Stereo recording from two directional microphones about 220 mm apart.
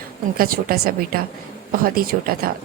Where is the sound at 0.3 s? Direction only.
40° right (ahead or behind).